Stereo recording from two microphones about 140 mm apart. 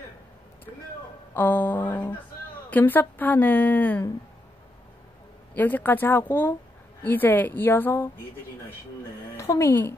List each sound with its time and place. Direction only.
1.3 s speech: 10° left (ahead or behind)
5.5 s speech: 10° left (ahead or behind)
9.4 s a woman's voice: 20° left (ahead or behind)